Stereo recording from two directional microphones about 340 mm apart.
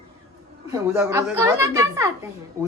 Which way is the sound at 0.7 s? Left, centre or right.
Centre.